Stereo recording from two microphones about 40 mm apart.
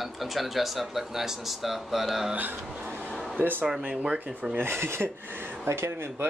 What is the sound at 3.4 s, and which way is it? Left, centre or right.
Speech, right.